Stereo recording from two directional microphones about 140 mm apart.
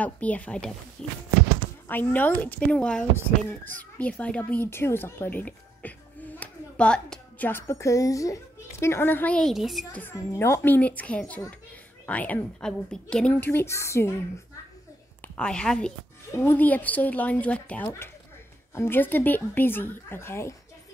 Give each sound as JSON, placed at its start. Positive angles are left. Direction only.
{"t": 0.0, "sound": "speech", "side_deg": 10}
{"t": 9.9, "sound": "speech", "side_deg": 15}
{"t": 15.2, "sound": "a woman's voice", "side_deg": 5}